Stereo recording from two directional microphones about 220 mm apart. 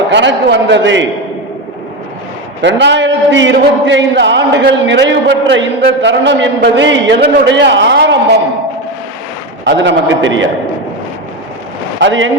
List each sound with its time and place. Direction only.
0.1 s a man's voice: 55° right (ahead or behind)
2.6 s a man's voice: 55° right (ahead or behind)
9.6 s a man's voice: 55° right (ahead or behind)
11.9 s a man's voice: 60° right (ahead or behind)